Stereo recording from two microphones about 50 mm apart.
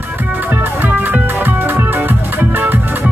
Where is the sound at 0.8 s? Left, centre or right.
Right.